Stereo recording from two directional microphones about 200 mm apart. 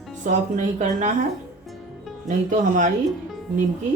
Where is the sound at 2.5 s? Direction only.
40° right (ahead or behind).